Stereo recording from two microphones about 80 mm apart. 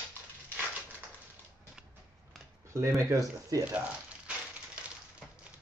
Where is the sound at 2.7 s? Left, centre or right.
Right.